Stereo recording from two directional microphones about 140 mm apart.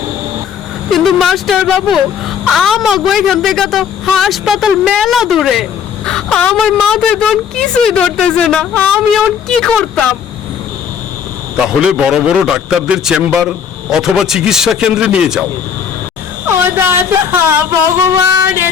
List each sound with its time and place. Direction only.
0.9 s a woman's voice: centre (ahead or behind)
11.6 s a woman's voice: 5° right (ahead or behind)
16.5 s speech: 15° right (ahead or behind)
18.1 s music: 15° right (ahead or behind)